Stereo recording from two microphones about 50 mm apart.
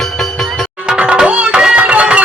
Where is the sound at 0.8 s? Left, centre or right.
Right.